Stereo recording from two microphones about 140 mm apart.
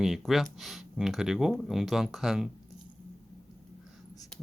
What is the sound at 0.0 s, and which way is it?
Speech, centre (ahead or behind).